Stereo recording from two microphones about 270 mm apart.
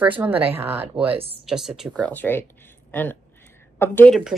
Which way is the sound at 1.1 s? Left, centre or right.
Right.